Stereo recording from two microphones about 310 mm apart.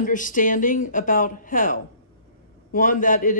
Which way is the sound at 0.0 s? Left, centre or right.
Left.